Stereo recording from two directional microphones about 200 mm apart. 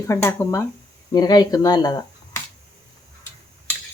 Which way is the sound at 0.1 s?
10° left (ahead or behind).